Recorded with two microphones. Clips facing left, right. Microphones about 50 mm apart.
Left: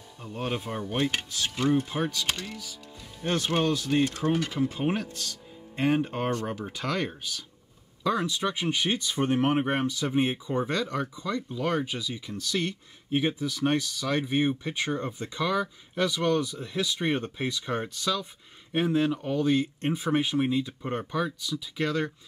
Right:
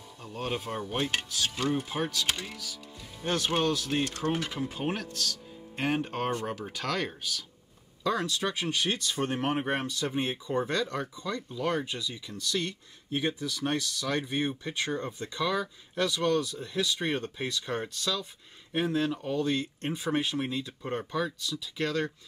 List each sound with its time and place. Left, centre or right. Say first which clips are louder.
0.2 s speech: left 2 dB; centre
3.9 s speech: left 5 dB; centre
4.3 s speech: left 4 dB; centre
4.7 s speech: left 4 dB; centre
6.0 s speech: left 2 dB; centre
6.4 s speech: left 1 dB; centre